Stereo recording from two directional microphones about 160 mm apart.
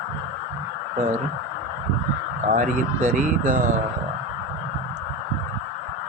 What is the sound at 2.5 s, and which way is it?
Speech, 50° right (ahead or behind).